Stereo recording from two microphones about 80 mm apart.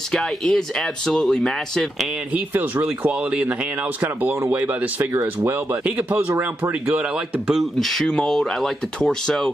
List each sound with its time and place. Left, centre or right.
0.1 s speech: centre
2.3 s speech: right
7.8 s speech: centre